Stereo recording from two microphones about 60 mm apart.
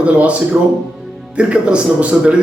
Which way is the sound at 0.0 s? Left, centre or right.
Right.